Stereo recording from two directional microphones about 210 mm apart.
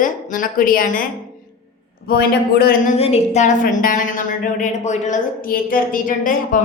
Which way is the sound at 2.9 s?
30° left (ahead or behind).